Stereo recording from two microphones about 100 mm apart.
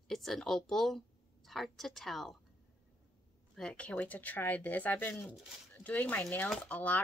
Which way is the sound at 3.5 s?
10° left (ahead or behind).